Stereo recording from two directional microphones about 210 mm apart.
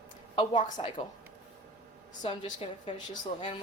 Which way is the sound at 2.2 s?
30° left (ahead or behind).